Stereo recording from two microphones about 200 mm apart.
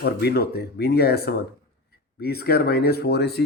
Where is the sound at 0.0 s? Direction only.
50° left (ahead or behind).